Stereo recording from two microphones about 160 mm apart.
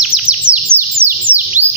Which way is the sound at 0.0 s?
5° right (ahead or behind).